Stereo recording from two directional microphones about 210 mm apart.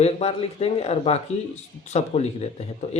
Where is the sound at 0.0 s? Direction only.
30° left (ahead or behind).